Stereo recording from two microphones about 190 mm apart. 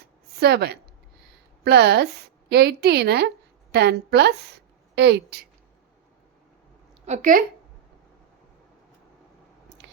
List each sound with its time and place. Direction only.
0.0 s a sound: 60° right (ahead or behind)
1.6 s a woman's voice: 60° right (ahead or behind)
7.0 s speech: 40° right (ahead or behind)